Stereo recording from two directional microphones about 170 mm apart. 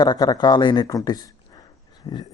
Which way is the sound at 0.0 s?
25° left (ahead or behind).